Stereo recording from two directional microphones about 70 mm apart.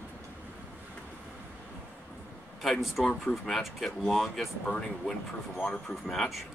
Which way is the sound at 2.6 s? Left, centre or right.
Centre.